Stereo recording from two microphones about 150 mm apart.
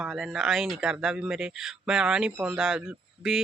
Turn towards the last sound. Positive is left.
turn(degrees=-5)  # may be behind; listen again after turning